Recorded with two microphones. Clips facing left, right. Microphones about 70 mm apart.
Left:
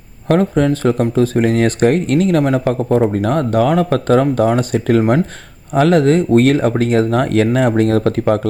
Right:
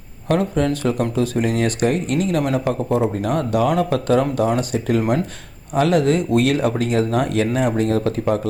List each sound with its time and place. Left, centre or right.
0.3 s speech: left